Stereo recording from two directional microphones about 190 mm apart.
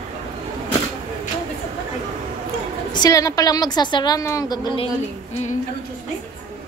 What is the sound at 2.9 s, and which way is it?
A woman's voice, 20° left (ahead or behind).